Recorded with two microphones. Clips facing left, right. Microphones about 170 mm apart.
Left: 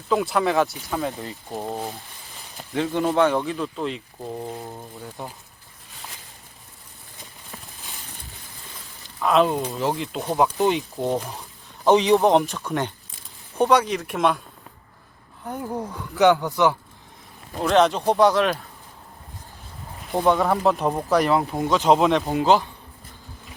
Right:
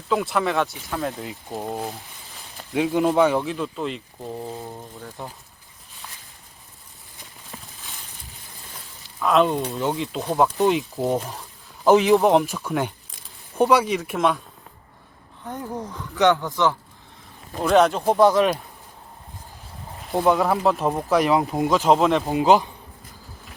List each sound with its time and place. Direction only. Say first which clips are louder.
0.1 s speech: left 1 dB; centre (ahead or behind)
9.2 s speech: even; centre (ahead or behind)
15.4 s speech: left 2 dB; 10° left (ahead or behind)
17.6 s speech: right 1 dB; centre (ahead or behind)
20.1 s speech: even; centre (ahead or behind)
21.3 s speech: right 2 dB; 15° right (ahead or behind)
21.7 s speech: left 1 dB; centre (ahead or behind)
22.3 s speech: right 1 dB; 15° right (ahead or behind)